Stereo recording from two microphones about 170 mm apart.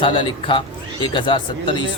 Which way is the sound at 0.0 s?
30° left (ahead or behind).